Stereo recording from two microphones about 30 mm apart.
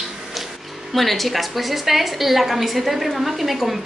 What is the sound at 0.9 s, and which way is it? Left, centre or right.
A woman's voice, centre.